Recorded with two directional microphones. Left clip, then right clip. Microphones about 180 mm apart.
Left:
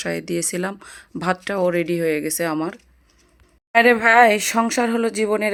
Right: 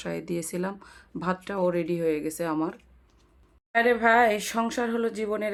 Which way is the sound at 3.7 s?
40° left (ahead or behind).